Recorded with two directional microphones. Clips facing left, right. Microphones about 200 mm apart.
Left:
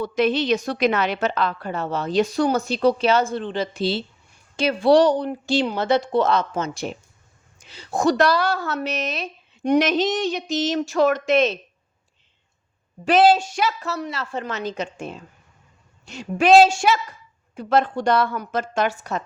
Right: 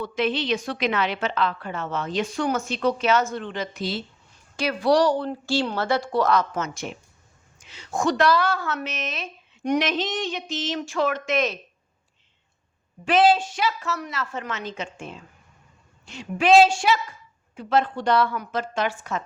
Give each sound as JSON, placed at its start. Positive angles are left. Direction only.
{"t": 0.0, "sound": "a woman's voice", "side_deg": 40}
{"t": 13.1, "sound": "a woman's voice", "side_deg": 40}